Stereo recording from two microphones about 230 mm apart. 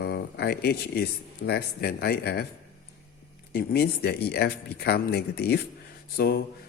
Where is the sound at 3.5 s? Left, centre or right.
Left.